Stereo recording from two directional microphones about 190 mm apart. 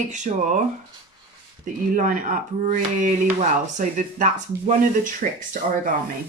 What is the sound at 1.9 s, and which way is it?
Speech, 45° right (ahead or behind).